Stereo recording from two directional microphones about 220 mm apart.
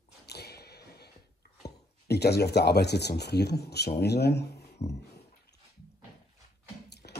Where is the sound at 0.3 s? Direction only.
45° left (ahead or behind).